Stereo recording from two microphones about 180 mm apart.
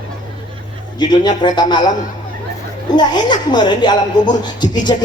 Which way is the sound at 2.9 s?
25° left (ahead or behind).